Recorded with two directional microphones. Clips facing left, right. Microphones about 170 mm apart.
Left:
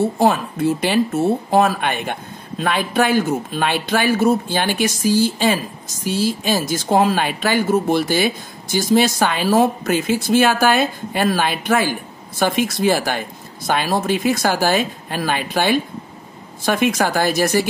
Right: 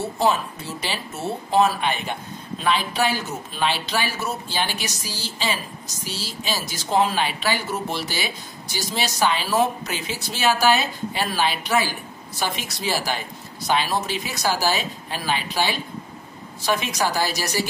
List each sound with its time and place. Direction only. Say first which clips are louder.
0.0 s speech: left 5 dB; 55° left (ahead or behind)